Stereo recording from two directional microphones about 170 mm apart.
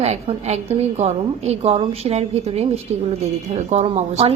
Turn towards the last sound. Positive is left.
turn(degrees=-40)  # may be behind; listen again after turning